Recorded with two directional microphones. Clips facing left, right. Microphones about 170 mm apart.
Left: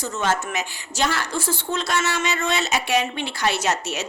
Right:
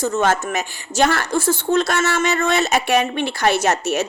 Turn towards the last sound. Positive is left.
turn(degrees=-50)  # may be behind; listen again after turning